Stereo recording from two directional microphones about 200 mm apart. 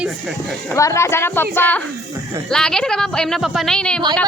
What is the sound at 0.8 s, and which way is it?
A woman's voice, 15° left (ahead or behind).